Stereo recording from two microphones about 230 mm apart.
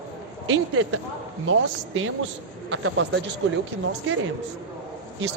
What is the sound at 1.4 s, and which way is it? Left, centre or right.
Speech, right.